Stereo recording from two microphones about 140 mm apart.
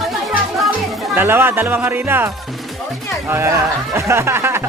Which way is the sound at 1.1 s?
15° right (ahead or behind).